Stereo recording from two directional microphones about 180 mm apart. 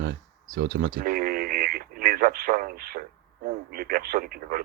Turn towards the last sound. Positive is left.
turn(degrees=-55)  # may be behind; listen again after turning